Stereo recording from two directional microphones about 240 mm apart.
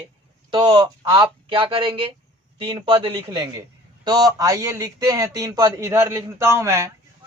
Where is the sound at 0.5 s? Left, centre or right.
Centre.